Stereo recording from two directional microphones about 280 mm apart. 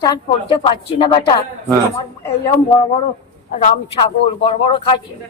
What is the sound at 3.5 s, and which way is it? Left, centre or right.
A man's voice, left.